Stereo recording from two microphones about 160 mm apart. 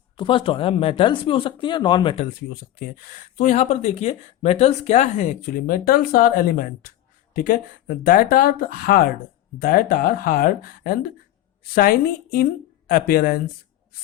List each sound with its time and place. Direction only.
0.2 s speech: 30° left (ahead or behind)
2.5 s a woman's voice: 65° left (ahead or behind)